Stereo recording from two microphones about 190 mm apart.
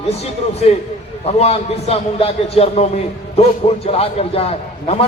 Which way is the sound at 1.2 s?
30° left (ahead or behind).